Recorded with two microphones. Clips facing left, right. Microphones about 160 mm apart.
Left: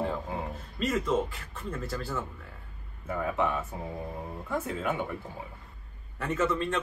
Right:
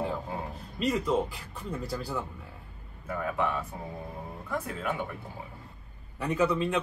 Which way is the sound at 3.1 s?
25° left (ahead or behind).